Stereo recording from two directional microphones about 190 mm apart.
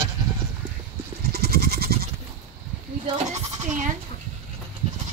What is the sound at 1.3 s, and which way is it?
Goat, 55° right (ahead or behind).